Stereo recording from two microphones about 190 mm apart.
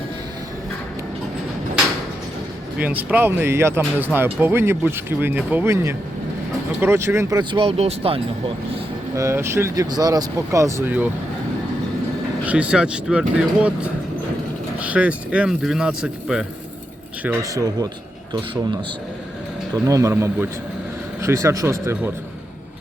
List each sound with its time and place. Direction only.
2.7 s speech: 10° right (ahead or behind); by 8.2 s 30° right (ahead or behind)
9.1 s speech: 15° right (ahead or behind)
12.5 s speech: 5° right (ahead or behind)
17.2 s speech: 20° right (ahead or behind)
19.7 s speech: 15° right (ahead or behind)